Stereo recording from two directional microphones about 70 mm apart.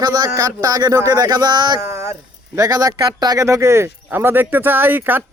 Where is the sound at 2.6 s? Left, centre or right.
Right.